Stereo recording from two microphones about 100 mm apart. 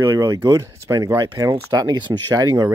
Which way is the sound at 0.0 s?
35° right (ahead or behind).